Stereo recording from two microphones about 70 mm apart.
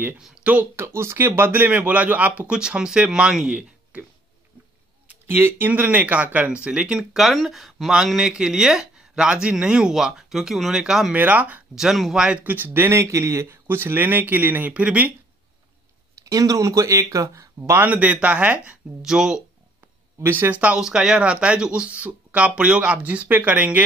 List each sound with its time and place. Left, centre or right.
0.2 s speech: centre
0.5 s a man's voice: right; by 4.0 s centre
5.2 s speech: right
5.7 s speech: right
11.1 s a man's voice: right
11.7 s speech: centre
12.4 s a man's voice: right
14.7 s a man's voice: centre
16.3 s speech: right
17.8 s a man's voice: right
19.0 s speech: centre
20.2 s speech: right
20.6 s speech: centre